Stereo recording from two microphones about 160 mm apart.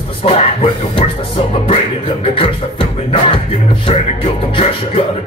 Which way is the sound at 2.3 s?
35° left (ahead or behind).